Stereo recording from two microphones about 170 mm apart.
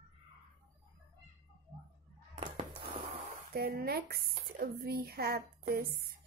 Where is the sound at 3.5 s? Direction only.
65° right (ahead or behind).